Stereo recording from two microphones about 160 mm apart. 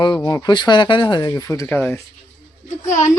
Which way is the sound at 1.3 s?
15° left (ahead or behind).